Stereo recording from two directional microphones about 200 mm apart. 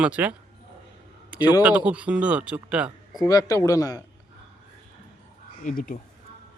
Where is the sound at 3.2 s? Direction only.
20° left (ahead or behind).